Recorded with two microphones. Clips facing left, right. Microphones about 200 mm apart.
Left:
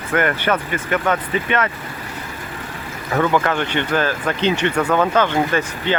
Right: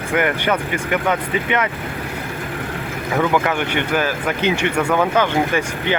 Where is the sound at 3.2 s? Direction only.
10° right (ahead or behind).